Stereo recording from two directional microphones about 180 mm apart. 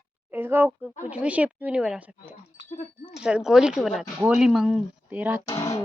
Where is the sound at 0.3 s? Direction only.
10° right (ahead or behind).